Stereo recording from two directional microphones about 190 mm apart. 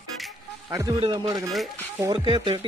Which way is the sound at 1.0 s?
20° right (ahead or behind).